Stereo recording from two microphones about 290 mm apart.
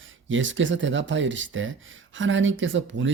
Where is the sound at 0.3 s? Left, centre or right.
Right.